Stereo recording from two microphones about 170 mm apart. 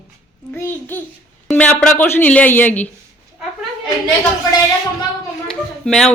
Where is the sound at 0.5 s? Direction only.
15° left (ahead or behind).